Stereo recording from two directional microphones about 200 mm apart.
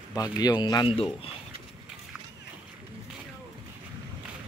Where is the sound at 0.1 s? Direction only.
20° left (ahead or behind).